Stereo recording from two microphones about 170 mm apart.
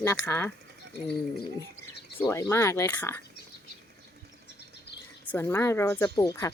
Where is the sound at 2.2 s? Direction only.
15° left (ahead or behind).